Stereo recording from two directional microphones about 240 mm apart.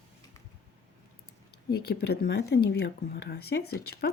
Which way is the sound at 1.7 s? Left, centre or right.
Left.